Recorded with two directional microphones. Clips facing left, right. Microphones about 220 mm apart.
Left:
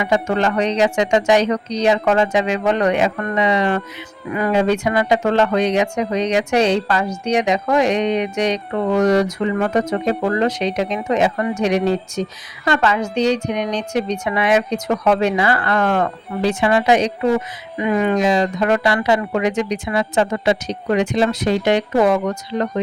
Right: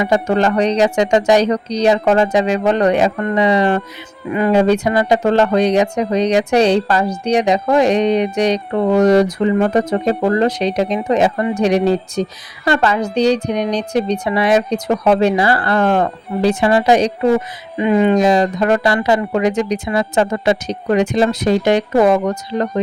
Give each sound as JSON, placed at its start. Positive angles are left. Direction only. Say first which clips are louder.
{"t": 0.0, "sound": "speech", "louder": "right 3 dB", "side_deg": -35}
{"t": 4.3, "sound": "speech", "louder": "right 4 dB", "side_deg": -25}
{"t": 4.5, "sound": "speech", "louder": "right 3 dB", "side_deg": -35}
{"t": 17.7, "sound": "speech", "louder": "right 4 dB", "side_deg": -25}
{"t": 18.2, "sound": "speech", "louder": "right 3 dB", "side_deg": -40}